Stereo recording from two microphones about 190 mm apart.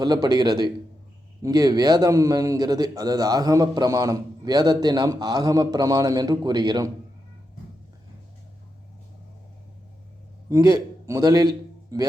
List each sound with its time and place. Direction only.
0.0 s speech: 20° right (ahead or behind)
10.5 s a man's voice: 15° right (ahead or behind)